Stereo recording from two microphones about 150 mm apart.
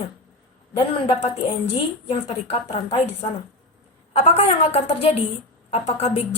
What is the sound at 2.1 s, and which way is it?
Speech, 40° left (ahead or behind).